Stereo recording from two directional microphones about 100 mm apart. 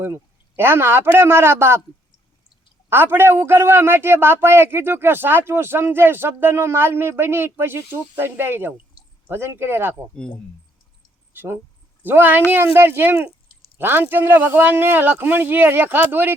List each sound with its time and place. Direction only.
0.0 s a man's voice: 25° right (ahead or behind)
2.9 s a man's voice: 20° right (ahead or behind)
12.0 s a man's voice: 20° right (ahead or behind)